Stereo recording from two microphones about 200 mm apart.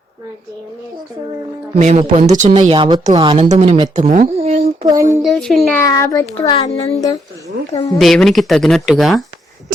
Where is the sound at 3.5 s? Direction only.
35° right (ahead or behind).